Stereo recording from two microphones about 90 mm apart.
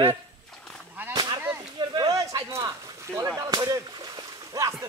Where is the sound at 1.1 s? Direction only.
55° right (ahead or behind).